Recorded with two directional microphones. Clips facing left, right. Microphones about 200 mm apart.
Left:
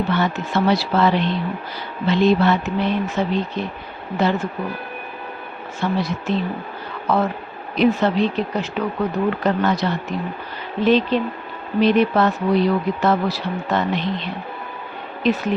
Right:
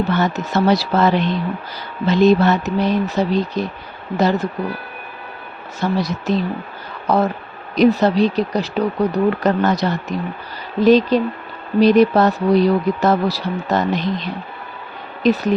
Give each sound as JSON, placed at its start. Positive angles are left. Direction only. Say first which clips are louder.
{"t": 0.1, "sound": "speech", "louder": "right 2 dB", "side_deg": -40}
{"t": 5.8, "sound": "speech", "louder": "right 2 dB", "side_deg": -40}